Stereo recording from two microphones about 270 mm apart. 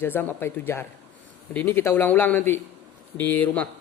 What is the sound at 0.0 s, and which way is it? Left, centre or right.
Speech, centre.